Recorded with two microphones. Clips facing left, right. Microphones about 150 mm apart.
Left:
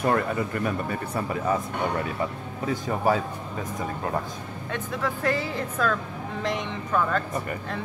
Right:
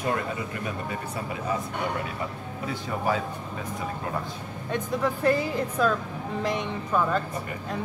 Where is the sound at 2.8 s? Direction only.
40° left (ahead or behind).